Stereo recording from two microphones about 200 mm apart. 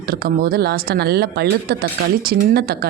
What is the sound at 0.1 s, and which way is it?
Speech, 50° right (ahead or behind).